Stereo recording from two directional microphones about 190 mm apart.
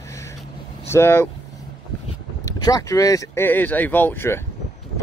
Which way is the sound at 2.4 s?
20° left (ahead or behind).